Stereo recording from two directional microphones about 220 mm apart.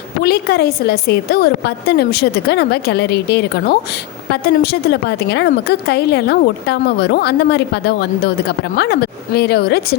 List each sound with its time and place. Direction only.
0.2 s a woman's voice: 45° left (ahead or behind)